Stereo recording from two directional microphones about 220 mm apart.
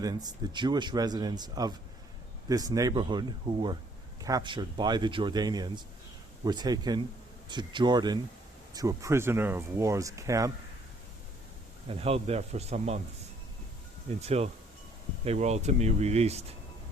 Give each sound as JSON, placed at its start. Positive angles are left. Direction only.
{"t": 0.0, "sound": "speech", "side_deg": -15}
{"t": 11.9, "sound": "speech", "side_deg": -25}
{"t": 14.2, "sound": "speech", "side_deg": -30}